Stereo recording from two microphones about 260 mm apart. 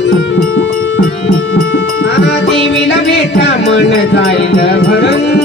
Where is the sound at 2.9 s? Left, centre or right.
Left.